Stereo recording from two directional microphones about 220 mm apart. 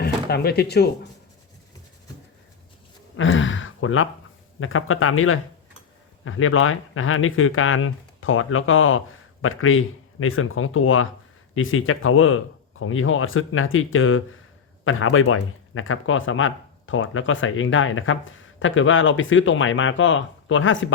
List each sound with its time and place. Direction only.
0.0 s speech: 45° left (ahead or behind)
3.2 s speech: 60° left (ahead or behind)